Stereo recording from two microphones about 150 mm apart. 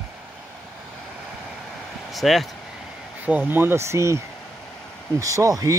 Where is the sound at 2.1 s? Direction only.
Centre (ahead or behind).